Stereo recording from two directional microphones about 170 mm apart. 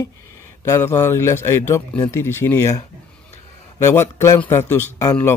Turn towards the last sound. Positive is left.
turn(degrees=15)  # may be behind; listen again after turning